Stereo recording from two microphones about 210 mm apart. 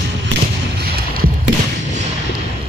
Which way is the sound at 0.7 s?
50° right (ahead or behind).